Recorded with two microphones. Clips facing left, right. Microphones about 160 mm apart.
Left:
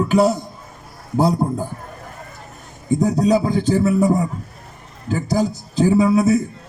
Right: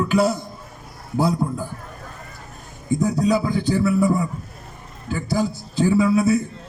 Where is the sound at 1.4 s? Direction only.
45° left (ahead or behind).